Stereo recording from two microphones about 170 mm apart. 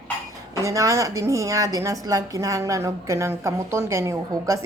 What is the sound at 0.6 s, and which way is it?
A woman's voice, 20° right (ahead or behind).